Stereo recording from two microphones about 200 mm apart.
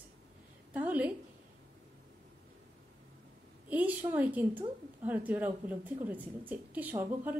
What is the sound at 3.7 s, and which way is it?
A woman's voice, 10° right (ahead or behind).